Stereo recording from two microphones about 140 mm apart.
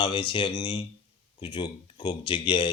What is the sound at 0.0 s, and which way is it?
Speech, 35° left (ahead or behind).